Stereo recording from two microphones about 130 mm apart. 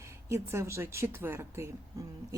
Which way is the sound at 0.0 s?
20° right (ahead or behind).